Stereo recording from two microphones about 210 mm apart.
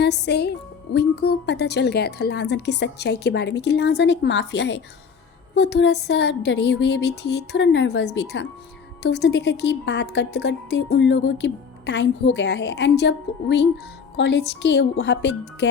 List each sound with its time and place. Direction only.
0.0 s a woman's voice: 55° left (ahead or behind)